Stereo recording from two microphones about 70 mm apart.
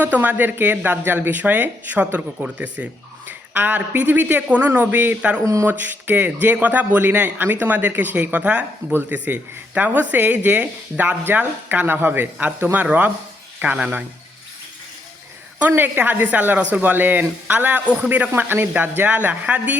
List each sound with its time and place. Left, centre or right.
0.0 s speech: right
15.7 s speech: right